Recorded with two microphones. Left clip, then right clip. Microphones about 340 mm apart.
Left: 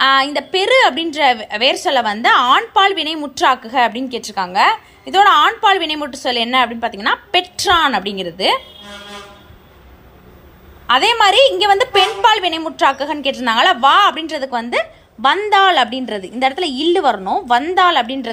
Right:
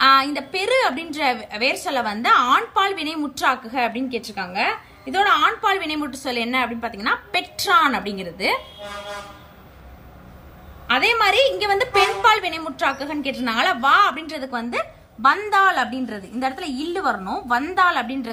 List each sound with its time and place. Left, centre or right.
0.0 s a woman's voice: centre
10.9 s a woman's voice: centre
16.9 s a woman's voice: left
17.6 s a woman's voice: centre